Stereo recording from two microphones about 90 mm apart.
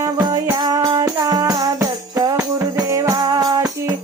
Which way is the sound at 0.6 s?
45° right (ahead or behind).